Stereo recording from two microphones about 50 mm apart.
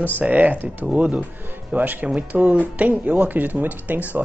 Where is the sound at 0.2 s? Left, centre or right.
Right.